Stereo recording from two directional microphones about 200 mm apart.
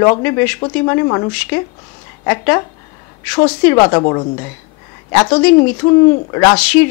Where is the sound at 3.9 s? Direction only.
20° left (ahead or behind).